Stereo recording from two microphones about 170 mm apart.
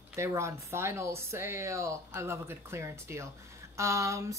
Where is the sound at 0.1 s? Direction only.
15° right (ahead or behind).